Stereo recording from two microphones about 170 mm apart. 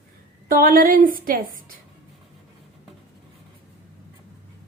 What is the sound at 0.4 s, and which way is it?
A woman's voice, 55° right (ahead or behind).